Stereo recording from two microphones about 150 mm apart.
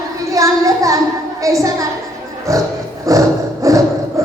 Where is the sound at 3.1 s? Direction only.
20° right (ahead or behind).